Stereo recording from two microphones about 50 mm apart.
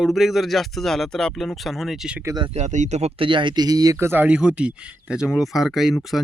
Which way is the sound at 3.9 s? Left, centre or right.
Right.